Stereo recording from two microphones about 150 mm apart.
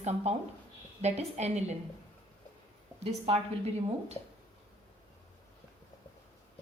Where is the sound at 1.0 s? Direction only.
45° right (ahead or behind).